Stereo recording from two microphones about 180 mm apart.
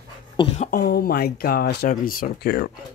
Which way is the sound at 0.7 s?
55° left (ahead or behind).